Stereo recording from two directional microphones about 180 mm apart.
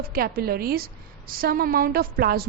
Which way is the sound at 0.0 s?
55° right (ahead or behind).